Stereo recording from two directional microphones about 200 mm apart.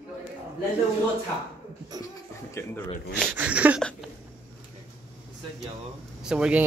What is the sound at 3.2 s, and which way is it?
Speech, 10° right (ahead or behind).